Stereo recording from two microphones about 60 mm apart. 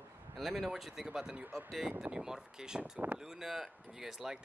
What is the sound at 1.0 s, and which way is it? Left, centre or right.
Speech, centre.